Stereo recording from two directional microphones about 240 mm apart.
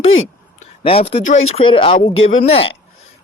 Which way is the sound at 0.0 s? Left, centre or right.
Left.